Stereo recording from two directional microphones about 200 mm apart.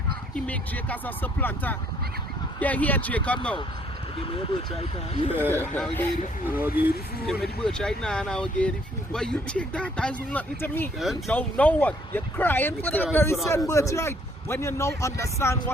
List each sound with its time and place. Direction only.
0.3 s speech: 5° left (ahead or behind)
4.7 s speech: 30° left (ahead or behind)
5.5 s speech: 5° left (ahead or behind)
6.7 s speech: 10° right (ahead or behind)
7.6 s speech: 5° left (ahead or behind)